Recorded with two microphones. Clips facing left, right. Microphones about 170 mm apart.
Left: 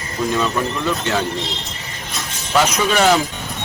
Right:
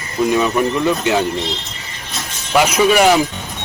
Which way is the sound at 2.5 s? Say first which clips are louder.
Right 4 dB; 10° right (ahead or behind).